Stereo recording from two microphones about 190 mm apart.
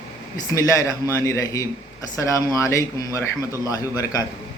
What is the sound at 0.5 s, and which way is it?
A man's voice, 15° left (ahead or behind).